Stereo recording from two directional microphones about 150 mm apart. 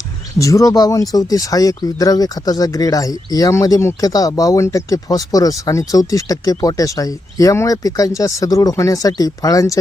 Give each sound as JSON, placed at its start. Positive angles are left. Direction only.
{"t": 0.3, "sound": "speech", "side_deg": 20}